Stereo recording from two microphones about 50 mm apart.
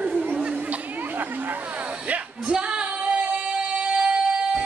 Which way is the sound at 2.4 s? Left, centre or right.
Centre.